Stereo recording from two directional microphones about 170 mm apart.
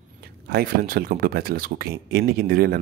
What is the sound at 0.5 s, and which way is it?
Speech, 65° right (ahead or behind).